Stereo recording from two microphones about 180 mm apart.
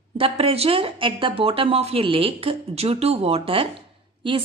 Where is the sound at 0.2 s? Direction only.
30° right (ahead or behind).